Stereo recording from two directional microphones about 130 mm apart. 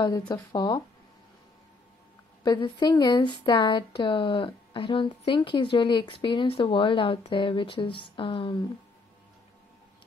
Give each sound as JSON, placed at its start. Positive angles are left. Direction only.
{"t": 0.3, "sound": "speech", "side_deg": 30}
{"t": 2.4, "sound": "speech", "side_deg": 35}